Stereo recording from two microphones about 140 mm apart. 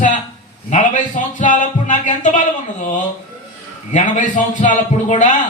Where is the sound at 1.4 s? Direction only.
65° left (ahead or behind).